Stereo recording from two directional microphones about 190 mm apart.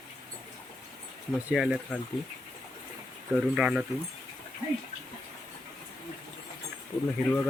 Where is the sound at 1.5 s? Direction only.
Centre (ahead or behind).